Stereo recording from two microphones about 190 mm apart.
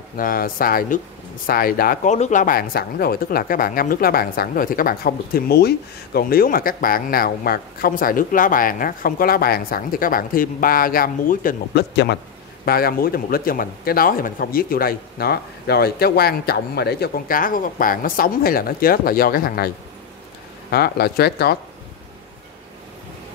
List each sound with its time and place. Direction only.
0.2 s speech: 50° left (ahead or behind)
2.1 s speech: 40° left (ahead or behind)
11.9 s speech: 65° left (ahead or behind)
12.6 s speech: 50° left (ahead or behind)
20.7 s speech: 55° left (ahead or behind)